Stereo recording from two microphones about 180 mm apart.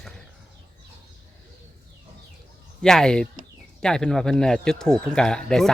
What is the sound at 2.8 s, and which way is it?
Speech, 5° left (ahead or behind).